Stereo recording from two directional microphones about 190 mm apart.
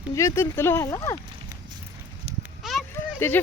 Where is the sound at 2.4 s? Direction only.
Centre (ahead or behind).